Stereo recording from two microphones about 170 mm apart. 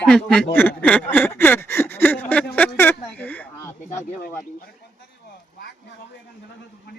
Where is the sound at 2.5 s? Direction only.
10° left (ahead or behind).